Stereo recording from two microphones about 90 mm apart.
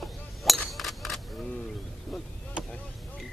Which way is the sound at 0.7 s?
Centre (ahead or behind).